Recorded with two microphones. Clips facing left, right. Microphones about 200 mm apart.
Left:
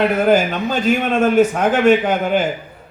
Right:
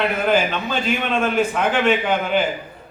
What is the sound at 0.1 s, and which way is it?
A man's voice, 45° left (ahead or behind).